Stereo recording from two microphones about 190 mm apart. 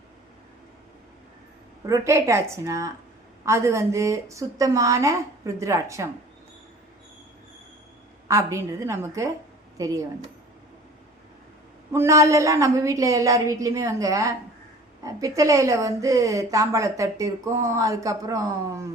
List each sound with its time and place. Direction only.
1.9 s a woman's voice: 15° right (ahead or behind)
8.3 s a woman's voice: 15° right (ahead or behind)
11.9 s a woman's voice: 15° right (ahead or behind)